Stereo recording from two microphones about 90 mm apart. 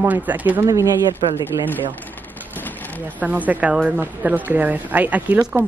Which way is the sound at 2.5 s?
20° left (ahead or behind).